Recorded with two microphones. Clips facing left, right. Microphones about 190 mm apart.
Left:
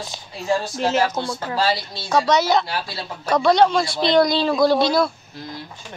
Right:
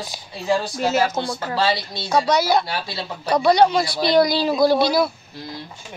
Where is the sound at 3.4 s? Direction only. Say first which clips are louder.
Even; 5° right (ahead or behind).